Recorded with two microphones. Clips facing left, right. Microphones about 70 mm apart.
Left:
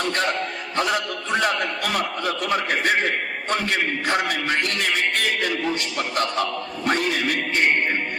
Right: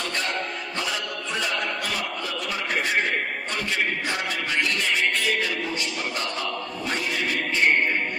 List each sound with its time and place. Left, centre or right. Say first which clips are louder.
0.8 s a man's voice: left 8 dB; left
6.8 s music: left 6 dB; left